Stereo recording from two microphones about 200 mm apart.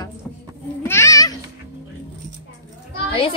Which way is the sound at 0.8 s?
15° left (ahead or behind).